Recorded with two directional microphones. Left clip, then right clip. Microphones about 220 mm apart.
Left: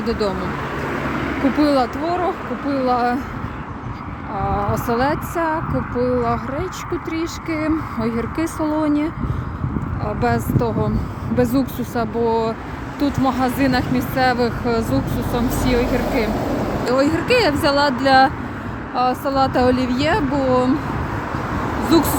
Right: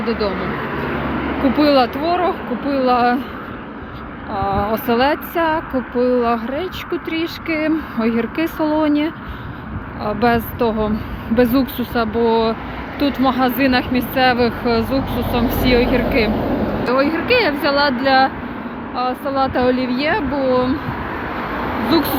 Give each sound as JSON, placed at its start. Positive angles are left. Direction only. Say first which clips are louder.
{"t": 0.0, "sound": "speech", "louder": "right 1 dB", "side_deg": 35}
{"t": 1.5, "sound": "speech", "louder": "right 4 dB", "side_deg": 15}
{"t": 4.4, "sound": "speech", "louder": "right 3 dB", "side_deg": 15}
{"t": 21.9, "sound": "speech", "louder": "left 1 dB", "side_deg": 30}